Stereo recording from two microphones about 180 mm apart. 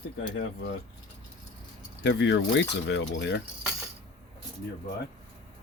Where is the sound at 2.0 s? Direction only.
75° left (ahead or behind).